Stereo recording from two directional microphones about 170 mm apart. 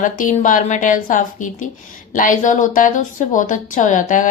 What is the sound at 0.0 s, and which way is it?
A woman's voice, 50° left (ahead or behind).